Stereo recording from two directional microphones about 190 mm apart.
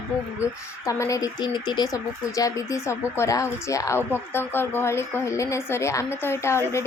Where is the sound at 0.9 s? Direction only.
15° left (ahead or behind).